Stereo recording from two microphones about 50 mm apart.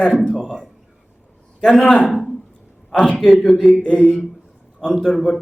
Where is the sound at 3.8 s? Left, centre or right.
Left.